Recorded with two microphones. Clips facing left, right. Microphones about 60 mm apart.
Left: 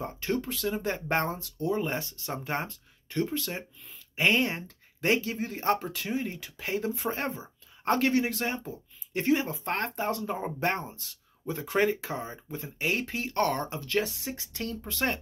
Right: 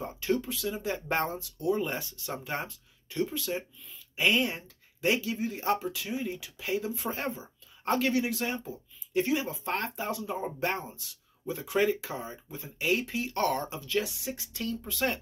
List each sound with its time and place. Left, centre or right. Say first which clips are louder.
0.0 s speech: right 1 dB; left
3.1 s speech: left 1 dB; left
13.7 s speech: left 2 dB; left
14.1 s speech: even; left